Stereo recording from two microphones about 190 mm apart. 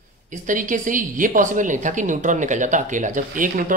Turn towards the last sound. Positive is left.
turn(degrees=-45)  # may be behind; listen again after turning